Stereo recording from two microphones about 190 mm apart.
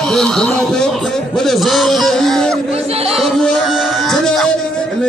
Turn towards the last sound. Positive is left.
turn(degrees=0)  # may be behind; listen again after turning